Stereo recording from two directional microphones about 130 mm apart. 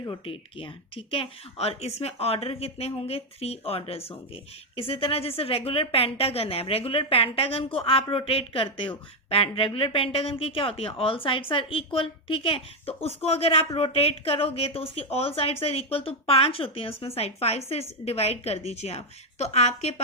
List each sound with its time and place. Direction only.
0.3 s speech: 45° left (ahead or behind)